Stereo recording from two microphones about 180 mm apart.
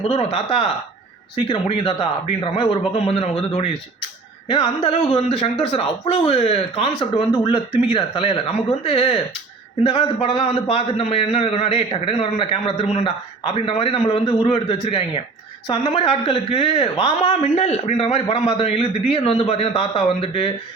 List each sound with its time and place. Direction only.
0.1 s a man's voice: 35° left (ahead or behind)